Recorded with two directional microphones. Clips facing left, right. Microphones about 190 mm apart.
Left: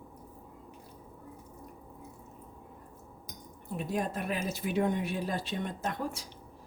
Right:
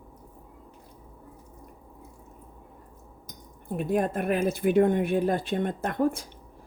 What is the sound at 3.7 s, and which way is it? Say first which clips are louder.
Speech: right 7 dB; 55° right (ahead or behind).